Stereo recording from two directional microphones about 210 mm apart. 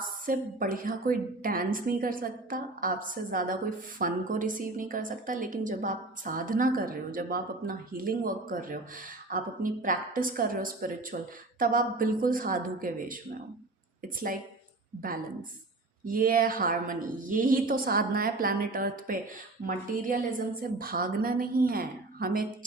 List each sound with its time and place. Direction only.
0.0 s a woman's voice: 40° right (ahead or behind)
16.0 s a woman's voice: 40° right (ahead or behind)
20.6 s a woman's voice: 45° right (ahead or behind)